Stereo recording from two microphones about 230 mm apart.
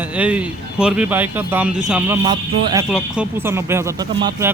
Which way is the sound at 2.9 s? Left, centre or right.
Centre.